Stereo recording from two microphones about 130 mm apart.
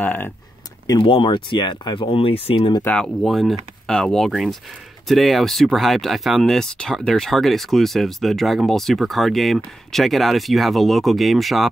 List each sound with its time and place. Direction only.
0.0 s speech: 10° left (ahead or behind)
0.9 s speech: 40° left (ahead or behind)
2.8 s speech: 10° left (ahead or behind)